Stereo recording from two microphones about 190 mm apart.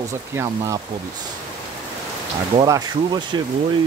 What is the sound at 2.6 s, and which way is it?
Speech, 20° right (ahead or behind).